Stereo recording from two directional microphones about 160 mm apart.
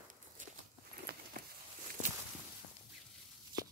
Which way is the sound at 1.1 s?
90° right.